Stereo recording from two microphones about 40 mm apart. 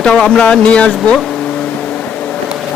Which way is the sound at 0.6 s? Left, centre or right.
Left.